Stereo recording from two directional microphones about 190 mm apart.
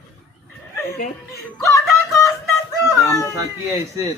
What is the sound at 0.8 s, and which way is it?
Music, 55° left (ahead or behind).